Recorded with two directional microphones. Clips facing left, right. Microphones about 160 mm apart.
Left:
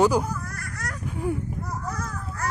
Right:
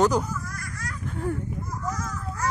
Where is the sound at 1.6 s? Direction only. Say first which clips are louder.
Even; 65° left (ahead or behind).